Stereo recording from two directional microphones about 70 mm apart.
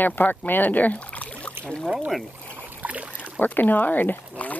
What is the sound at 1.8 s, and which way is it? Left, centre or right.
Speech, centre.